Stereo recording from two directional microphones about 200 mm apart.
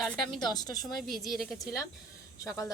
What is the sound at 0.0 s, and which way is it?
Speech, centre (ahead or behind).